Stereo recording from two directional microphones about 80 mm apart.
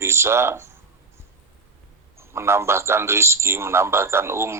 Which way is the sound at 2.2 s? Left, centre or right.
Right.